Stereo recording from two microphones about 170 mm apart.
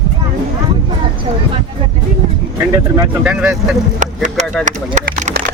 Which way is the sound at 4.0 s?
45° right (ahead or behind).